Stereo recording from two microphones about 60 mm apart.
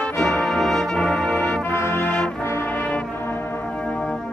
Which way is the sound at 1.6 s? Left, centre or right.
Left.